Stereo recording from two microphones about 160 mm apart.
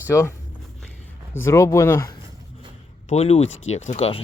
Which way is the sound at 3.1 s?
40° left (ahead or behind).